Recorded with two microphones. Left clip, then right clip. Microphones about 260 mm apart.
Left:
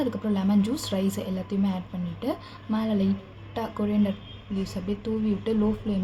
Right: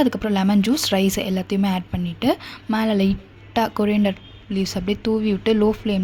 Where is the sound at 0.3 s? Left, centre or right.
Right.